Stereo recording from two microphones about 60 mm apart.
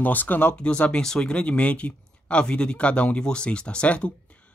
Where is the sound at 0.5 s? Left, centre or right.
Centre.